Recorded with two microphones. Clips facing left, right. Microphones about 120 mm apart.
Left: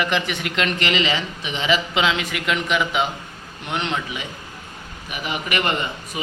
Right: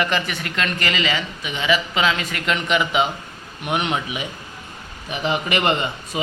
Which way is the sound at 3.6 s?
10° right (ahead or behind).